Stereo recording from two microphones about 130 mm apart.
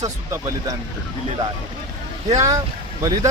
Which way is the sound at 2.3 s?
25° right (ahead or behind).